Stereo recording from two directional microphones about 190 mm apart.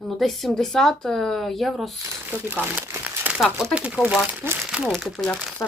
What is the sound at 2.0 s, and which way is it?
Speech, 10° right (ahead or behind).